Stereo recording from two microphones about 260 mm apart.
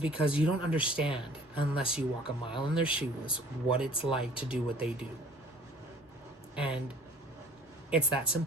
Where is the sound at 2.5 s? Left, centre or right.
Centre.